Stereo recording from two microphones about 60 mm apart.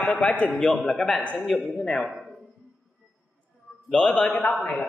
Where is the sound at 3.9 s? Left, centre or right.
Centre.